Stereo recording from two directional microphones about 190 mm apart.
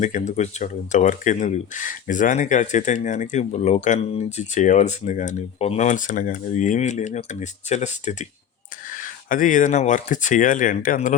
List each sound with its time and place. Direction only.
0.0 s speech: 40° left (ahead or behind)